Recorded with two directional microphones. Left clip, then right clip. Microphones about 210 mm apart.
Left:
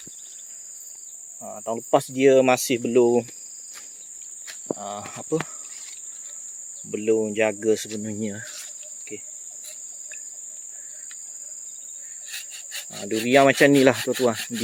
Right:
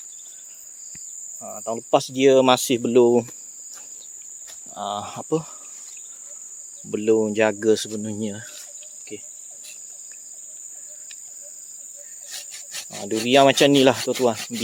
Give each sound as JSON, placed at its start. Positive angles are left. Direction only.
{"t": 1.5, "sound": "speech", "side_deg": -5}
{"t": 4.8, "sound": "speech", "side_deg": -20}
{"t": 6.9, "sound": "speech", "side_deg": -25}
{"t": 7.9, "sound": "speech", "side_deg": -5}
{"t": 12.9, "sound": "speech", "side_deg": -15}